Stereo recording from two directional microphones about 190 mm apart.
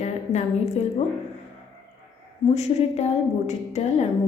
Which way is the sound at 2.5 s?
35° left (ahead or behind).